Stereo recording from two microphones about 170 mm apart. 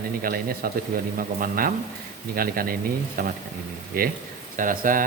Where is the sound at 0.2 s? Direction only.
60° right (ahead or behind).